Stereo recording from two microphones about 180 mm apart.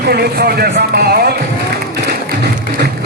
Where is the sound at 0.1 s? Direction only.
60° right (ahead or behind).